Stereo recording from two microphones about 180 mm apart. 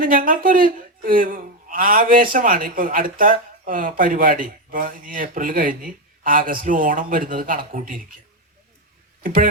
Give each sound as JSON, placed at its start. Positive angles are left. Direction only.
{"t": 0.0, "sound": "a man's voice", "side_deg": -50}
{"t": 9.2, "sound": "a man's voice", "side_deg": -50}